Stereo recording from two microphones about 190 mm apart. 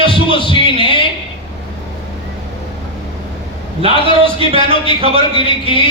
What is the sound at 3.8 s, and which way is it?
A man's voice, 30° right (ahead or behind).